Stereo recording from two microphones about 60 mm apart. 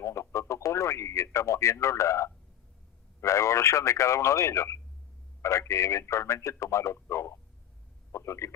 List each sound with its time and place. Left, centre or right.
0.0 s a man's voice: left